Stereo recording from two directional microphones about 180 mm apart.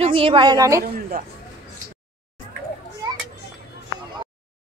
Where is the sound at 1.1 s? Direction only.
60° right (ahead or behind).